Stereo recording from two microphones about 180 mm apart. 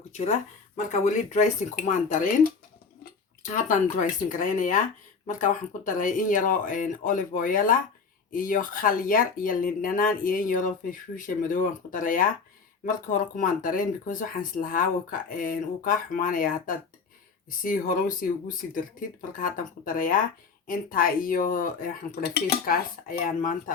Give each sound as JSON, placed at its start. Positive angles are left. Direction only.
{"t": 0.1, "sound": "speech", "side_deg": 40}